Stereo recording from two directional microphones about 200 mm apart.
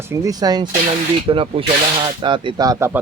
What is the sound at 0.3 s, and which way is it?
Speech, 20° right (ahead or behind).